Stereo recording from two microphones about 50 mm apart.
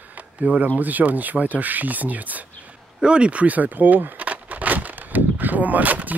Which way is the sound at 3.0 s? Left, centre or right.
Right.